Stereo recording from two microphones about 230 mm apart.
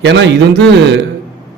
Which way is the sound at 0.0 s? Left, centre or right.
Right.